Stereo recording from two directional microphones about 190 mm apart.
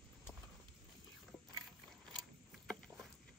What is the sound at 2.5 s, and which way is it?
Vehicle, centre (ahead or behind).